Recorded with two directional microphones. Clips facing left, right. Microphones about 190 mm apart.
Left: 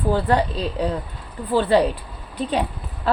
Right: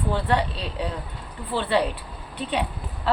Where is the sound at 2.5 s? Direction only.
40° left (ahead or behind).